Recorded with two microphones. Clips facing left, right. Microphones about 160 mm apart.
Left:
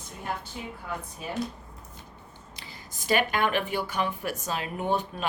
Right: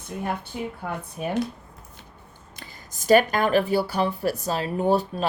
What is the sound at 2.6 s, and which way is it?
Speech, 45° right (ahead or behind).